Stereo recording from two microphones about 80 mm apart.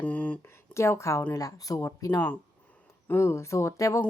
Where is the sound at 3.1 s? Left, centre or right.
Left.